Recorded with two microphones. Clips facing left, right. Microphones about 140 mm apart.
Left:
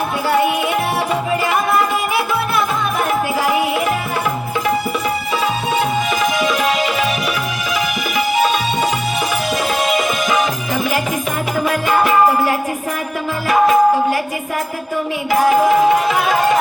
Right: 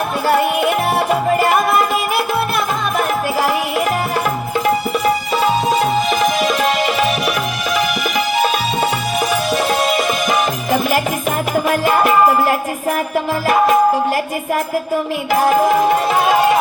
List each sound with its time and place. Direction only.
0.3 s music: 50° right (ahead or behind)
6.1 s music: 40° right (ahead or behind)
11.9 s music: 40° right (ahead or behind)